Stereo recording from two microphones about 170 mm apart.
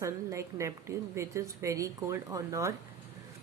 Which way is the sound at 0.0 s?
15° right (ahead or behind).